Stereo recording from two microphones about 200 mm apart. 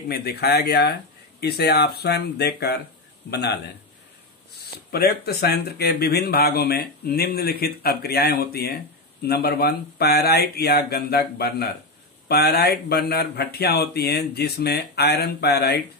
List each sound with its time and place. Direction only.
0.1 s speech: 50° left (ahead or behind)
4.9 s speech: 50° left (ahead or behind)